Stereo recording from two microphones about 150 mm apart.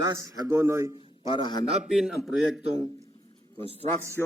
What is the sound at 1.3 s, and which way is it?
Speech, 30° left (ahead or behind).